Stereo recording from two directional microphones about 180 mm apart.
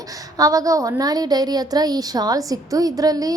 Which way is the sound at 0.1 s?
20° right (ahead or behind).